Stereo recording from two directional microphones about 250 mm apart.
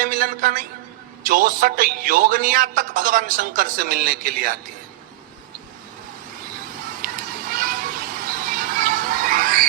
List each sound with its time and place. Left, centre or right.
0.0 s a woman's voice: right
7.0 s children playing: right